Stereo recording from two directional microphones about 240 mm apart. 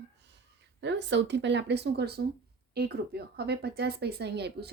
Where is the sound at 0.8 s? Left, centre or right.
Right.